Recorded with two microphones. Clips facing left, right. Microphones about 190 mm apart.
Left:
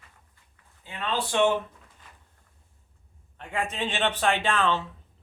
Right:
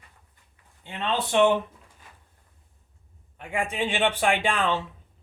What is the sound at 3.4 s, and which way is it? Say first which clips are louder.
A man's voice: right 2 dB; 10° right (ahead or behind).